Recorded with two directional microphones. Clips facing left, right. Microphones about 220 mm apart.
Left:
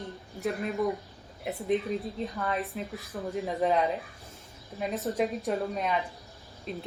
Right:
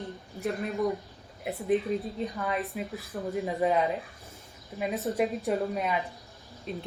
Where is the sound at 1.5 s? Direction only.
Centre (ahead or behind).